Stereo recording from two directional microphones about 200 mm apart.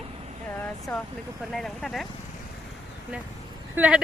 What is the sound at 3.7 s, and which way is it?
Speech, 5° right (ahead or behind).